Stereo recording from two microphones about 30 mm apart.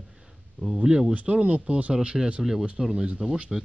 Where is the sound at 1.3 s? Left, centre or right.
Right.